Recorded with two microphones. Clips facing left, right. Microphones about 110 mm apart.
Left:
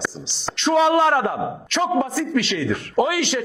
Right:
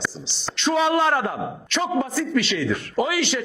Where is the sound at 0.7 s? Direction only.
60° left (ahead or behind).